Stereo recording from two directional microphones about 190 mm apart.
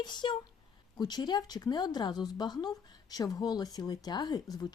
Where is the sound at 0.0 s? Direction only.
25° left (ahead or behind).